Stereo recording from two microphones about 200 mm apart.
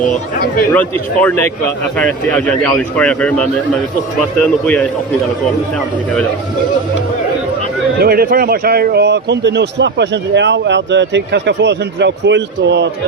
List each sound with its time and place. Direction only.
0.7 s a man's voice: 10° left (ahead or behind)
4.6 s a man's voice: 5° left (ahead or behind)
8.0 s a man's voice: 50° right (ahead or behind)